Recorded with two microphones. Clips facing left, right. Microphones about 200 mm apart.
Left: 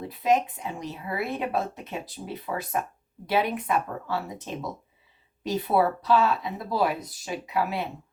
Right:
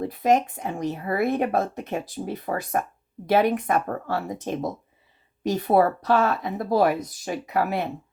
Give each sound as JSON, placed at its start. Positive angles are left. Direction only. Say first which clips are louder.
{"t": 0.0, "sound": "speech", "louder": "right 3 dB", "side_deg": -45}